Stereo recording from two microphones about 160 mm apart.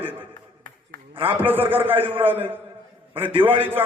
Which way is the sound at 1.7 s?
15° right (ahead or behind).